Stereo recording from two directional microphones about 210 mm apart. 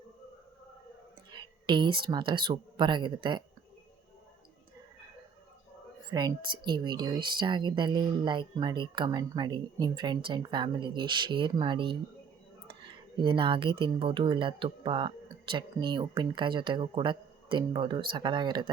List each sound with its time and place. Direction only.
1.3 s speech: 20° right (ahead or behind)
6.1 s speech: 20° right (ahead or behind)